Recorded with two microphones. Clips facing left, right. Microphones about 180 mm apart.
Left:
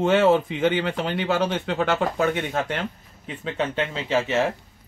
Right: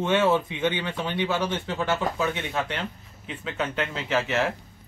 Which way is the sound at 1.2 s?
55° left (ahead or behind).